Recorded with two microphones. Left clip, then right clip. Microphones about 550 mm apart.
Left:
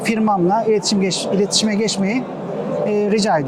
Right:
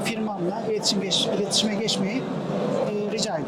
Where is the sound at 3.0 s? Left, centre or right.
Left.